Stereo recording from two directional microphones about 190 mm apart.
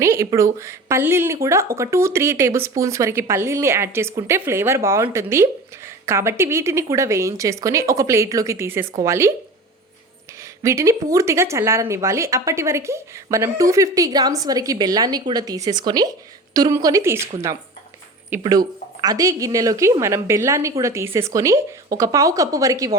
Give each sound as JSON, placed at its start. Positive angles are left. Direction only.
{"t": 0.0, "sound": "speech", "side_deg": -15}
{"t": 10.6, "sound": "a woman's voice", "side_deg": -15}